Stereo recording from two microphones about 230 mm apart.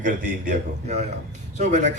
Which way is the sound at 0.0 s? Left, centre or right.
Right.